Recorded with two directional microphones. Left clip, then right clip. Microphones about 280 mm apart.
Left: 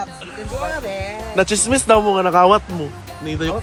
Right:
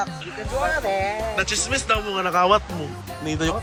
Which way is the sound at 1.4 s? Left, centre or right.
Centre.